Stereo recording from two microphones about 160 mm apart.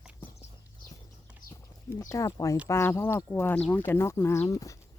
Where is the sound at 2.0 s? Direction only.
20° left (ahead or behind).